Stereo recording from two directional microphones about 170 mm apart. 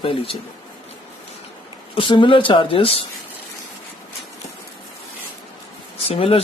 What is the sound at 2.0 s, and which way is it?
Speech, 30° left (ahead or behind).